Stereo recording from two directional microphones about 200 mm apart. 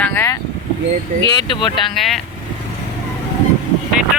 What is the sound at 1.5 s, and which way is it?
Speech, 25° left (ahead or behind).